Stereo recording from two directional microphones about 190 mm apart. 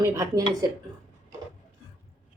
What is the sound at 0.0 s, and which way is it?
Speech, 20° right (ahead or behind).